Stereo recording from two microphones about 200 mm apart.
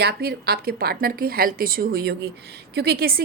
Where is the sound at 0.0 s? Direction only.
50° right (ahead or behind).